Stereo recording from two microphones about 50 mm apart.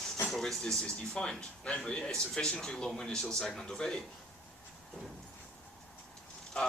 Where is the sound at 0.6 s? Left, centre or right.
Centre.